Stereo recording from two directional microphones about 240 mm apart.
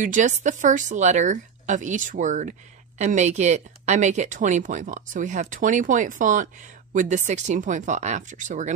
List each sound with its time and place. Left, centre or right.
0.0 s speech: right